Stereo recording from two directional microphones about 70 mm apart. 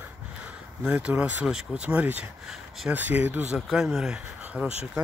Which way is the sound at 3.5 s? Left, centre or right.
Centre.